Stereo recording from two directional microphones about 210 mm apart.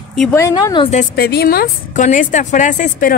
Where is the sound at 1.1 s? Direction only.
50° left (ahead or behind).